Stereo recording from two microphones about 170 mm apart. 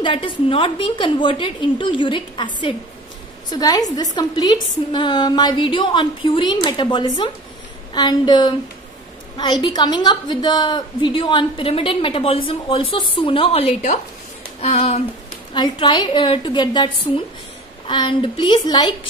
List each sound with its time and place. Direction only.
0.0 s a woman's voice: 30° left (ahead or behind)